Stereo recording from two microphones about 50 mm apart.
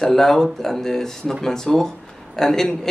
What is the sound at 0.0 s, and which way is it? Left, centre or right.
Speech, centre.